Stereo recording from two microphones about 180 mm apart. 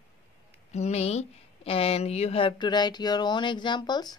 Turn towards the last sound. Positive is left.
turn(degrees=20)  # may be behind; listen again after turning